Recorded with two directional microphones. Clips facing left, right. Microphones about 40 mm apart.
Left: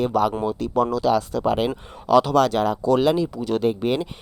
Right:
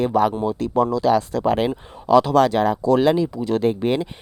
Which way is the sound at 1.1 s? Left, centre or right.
Right.